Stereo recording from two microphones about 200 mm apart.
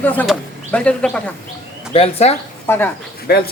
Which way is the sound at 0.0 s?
5° left (ahead or behind).